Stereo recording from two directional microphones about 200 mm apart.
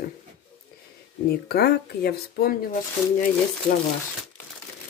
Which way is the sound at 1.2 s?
50° left (ahead or behind).